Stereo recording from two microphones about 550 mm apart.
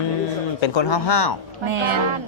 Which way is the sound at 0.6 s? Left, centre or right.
Left.